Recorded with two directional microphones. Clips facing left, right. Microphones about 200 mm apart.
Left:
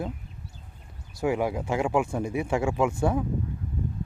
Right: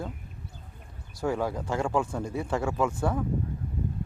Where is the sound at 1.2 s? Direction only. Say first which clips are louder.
Left 3 dB; 15° left (ahead or behind).